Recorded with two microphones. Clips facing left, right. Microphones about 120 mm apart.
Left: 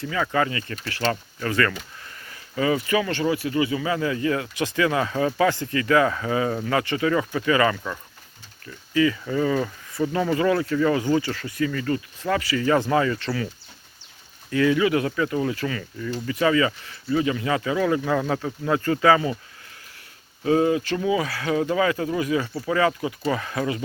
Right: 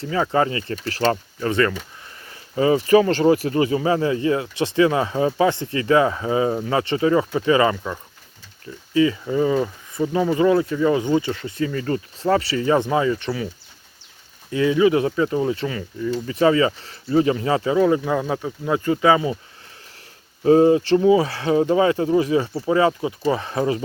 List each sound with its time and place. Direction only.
0.0 s speech: 30° right (ahead or behind)
1.4 s speech: 25° right (ahead or behind)
14.5 s speech: 20° right (ahead or behind)
20.4 s speech: 35° right (ahead or behind)